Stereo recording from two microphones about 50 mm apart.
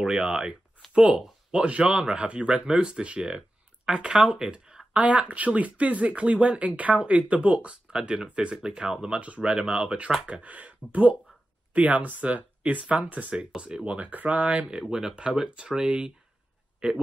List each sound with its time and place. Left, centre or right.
0.0 s speech: centre
9.2 s speech: right
9.5 s speech: centre